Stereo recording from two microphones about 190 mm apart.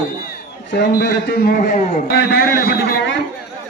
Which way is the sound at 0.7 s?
60° left (ahead or behind).